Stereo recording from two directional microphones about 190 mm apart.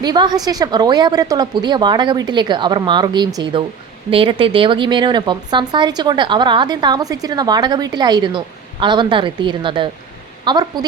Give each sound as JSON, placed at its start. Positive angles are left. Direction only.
{"t": 0.0, "sound": "speech", "side_deg": -20}